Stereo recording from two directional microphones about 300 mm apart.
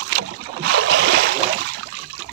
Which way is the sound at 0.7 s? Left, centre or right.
Right.